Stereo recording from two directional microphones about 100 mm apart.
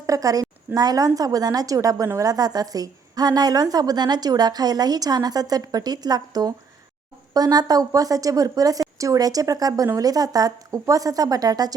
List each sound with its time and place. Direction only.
0.0 s a woman's voice: 35° right (ahead or behind)